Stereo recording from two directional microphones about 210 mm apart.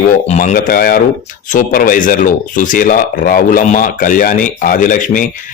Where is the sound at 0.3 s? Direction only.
35° left (ahead or behind).